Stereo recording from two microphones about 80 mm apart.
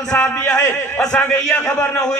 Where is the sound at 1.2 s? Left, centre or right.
Left.